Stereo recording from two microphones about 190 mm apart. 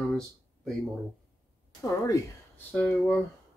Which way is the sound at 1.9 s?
15° left (ahead or behind).